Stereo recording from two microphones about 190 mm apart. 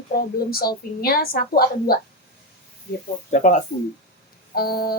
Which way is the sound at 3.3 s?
40° left (ahead or behind).